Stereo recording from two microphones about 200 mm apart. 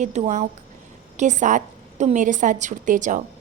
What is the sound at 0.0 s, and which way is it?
A woman's voice, 35° right (ahead or behind).